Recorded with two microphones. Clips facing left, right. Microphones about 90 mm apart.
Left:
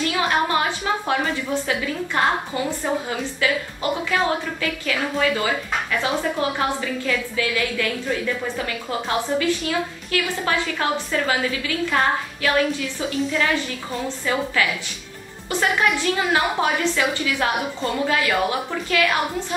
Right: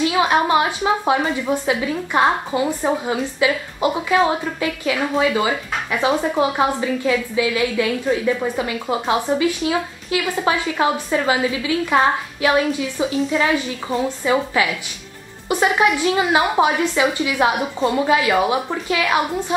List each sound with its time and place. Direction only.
0.0 s music: 10° right (ahead or behind)
0.5 s a woman's voice: 15° right (ahead or behind)
13.1 s a woman's voice: centre (ahead or behind)
14.0 s a woman's voice: 15° right (ahead or behind)